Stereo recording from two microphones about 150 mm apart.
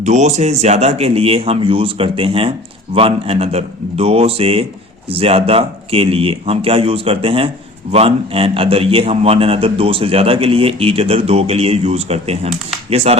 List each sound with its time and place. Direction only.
0.0 s a man's voice: 50° right (ahead or behind)